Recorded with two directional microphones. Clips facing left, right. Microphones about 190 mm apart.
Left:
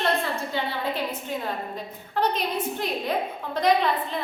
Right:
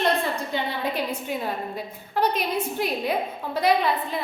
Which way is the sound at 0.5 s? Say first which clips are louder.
Right 1 dB; 15° right (ahead or behind).